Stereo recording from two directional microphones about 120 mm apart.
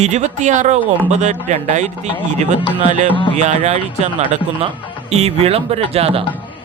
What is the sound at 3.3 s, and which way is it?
Speech, 70° right (ahead or behind).